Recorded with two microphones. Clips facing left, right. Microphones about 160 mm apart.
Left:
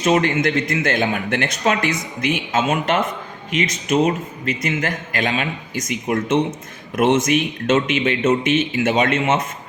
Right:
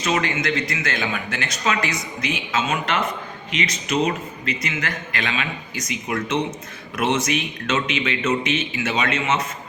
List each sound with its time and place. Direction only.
0.0 s speech: 50° left (ahead or behind)